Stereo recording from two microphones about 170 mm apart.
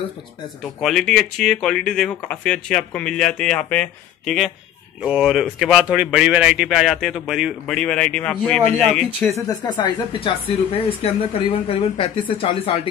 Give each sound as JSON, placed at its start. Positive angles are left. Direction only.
{"t": 0.7, "sound": "speech", "side_deg": 0}
{"t": 9.3, "sound": "speech", "side_deg": 20}